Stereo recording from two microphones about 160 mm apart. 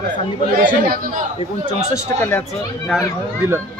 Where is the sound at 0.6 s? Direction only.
65° right (ahead or behind).